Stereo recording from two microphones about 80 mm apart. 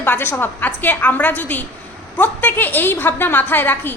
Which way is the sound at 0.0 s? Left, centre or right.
Left.